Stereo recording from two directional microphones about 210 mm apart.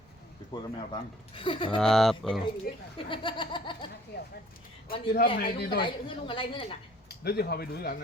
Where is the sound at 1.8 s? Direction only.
Centre (ahead or behind).